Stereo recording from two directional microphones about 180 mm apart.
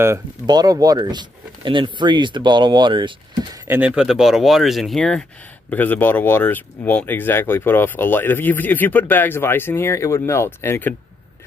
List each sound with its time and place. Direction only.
0.0 s speech: 20° right (ahead or behind)
3.6 s speech: 10° right (ahead or behind); by 11.0 s 10° left (ahead or behind)